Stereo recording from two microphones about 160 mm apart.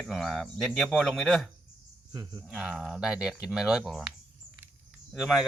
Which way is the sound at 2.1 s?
25° right (ahead or behind).